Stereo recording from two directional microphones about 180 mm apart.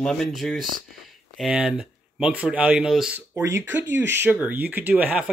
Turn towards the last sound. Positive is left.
turn(degrees=-5)  # may be behind; listen again after turning